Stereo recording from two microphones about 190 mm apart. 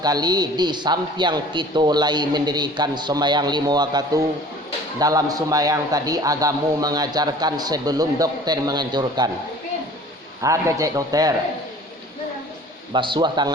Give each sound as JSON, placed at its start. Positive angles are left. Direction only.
{"t": 0.0, "sound": "a man's voice", "side_deg": -20}
{"t": 10.4, "sound": "a man's voice", "side_deg": -15}
{"t": 12.9, "sound": "a man's voice", "side_deg": -25}